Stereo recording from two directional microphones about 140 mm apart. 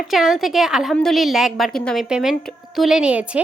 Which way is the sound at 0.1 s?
Centre (ahead or behind).